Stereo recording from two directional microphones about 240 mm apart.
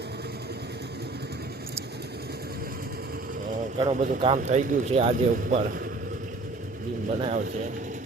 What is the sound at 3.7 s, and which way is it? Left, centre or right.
Speech, right.